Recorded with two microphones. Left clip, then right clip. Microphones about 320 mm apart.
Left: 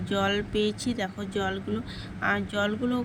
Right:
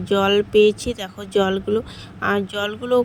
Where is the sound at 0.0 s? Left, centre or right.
Centre.